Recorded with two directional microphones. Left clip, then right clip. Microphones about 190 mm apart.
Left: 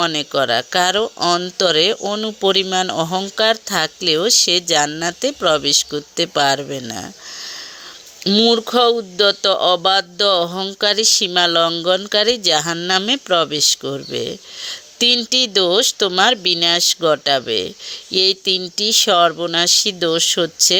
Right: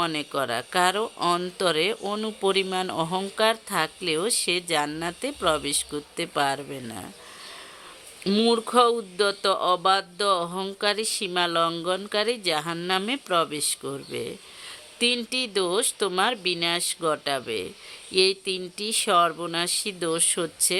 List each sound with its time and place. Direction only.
0.0 s speech: 25° left (ahead or behind)